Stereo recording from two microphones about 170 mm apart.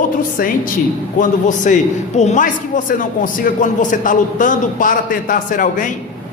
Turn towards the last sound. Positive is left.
turn(degrees=50)  # may be behind; listen again after turning